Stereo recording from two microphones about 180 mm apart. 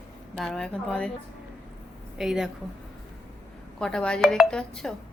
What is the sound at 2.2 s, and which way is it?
Speech, centre (ahead or behind).